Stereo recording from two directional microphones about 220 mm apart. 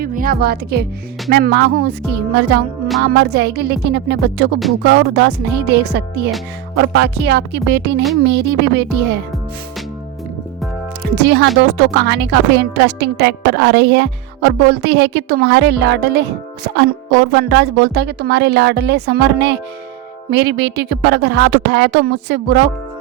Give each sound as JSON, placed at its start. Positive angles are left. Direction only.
{"t": 0.0, "sound": "a woman's voice", "side_deg": -40}
{"t": 3.0, "sound": "a woman's voice", "side_deg": -50}
{"t": 11.1, "sound": "a woman's voice", "side_deg": -50}